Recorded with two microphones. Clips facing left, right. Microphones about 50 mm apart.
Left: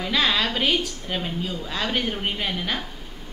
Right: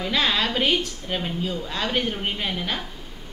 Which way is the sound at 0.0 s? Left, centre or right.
Centre.